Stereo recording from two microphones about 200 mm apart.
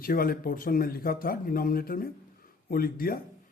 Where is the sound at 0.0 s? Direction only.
45° left (ahead or behind).